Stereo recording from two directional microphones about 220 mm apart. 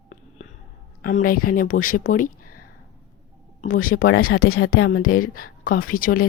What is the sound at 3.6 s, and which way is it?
A woman's voice, 40° left (ahead or behind).